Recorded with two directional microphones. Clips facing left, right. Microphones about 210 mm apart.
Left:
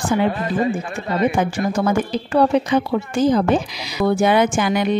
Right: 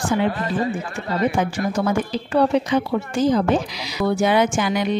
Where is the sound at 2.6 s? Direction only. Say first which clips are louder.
Left 2 dB; 55° left (ahead or behind).